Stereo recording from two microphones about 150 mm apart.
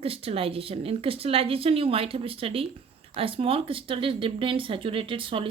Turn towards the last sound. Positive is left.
turn(degrees=-35)  # may be behind; listen again after turning